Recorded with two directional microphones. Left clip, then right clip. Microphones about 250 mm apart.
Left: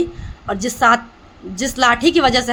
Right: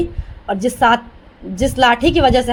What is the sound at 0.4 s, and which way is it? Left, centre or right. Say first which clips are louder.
A woman's voice: right 1 dB; centre.